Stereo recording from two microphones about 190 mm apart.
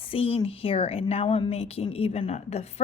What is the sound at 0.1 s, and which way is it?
A woman's voice, 30° left (ahead or behind).